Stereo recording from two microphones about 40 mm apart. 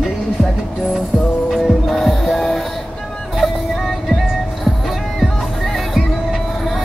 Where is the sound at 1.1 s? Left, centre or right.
Centre.